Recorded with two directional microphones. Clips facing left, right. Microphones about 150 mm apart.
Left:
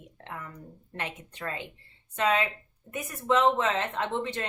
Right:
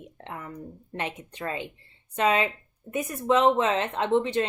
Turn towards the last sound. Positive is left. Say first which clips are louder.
# right 7 dB
turn(degrees=-20)  # may be behind; listen again after turning